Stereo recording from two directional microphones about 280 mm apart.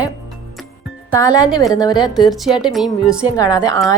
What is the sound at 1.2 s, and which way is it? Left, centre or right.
Speech, centre.